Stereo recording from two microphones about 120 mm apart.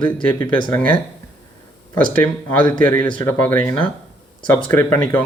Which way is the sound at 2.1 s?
15° left (ahead or behind).